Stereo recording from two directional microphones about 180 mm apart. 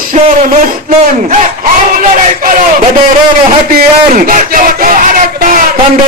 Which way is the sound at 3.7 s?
50° right (ahead or behind).